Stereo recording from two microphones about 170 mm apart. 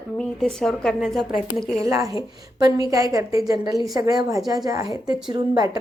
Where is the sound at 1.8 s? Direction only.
20° right (ahead or behind).